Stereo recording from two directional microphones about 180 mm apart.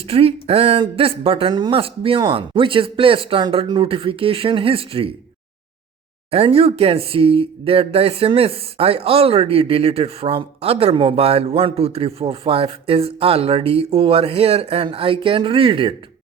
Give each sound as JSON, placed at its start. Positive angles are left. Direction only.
{"t": 0.0, "sound": "speech", "side_deg": -30}
{"t": 6.3, "sound": "speech", "side_deg": -35}